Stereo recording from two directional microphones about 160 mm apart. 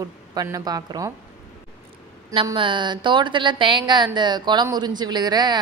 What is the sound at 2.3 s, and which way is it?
Speech, 30° right (ahead or behind).